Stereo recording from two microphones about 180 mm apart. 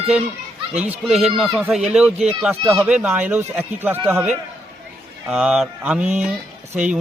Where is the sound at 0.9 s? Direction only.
Centre (ahead or behind).